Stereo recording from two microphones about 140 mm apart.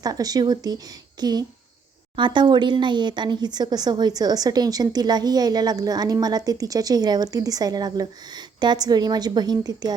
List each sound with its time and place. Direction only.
0.0 s speech: 25° right (ahead or behind)